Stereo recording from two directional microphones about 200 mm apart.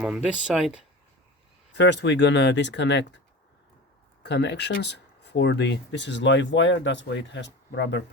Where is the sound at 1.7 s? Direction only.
60° left (ahead or behind).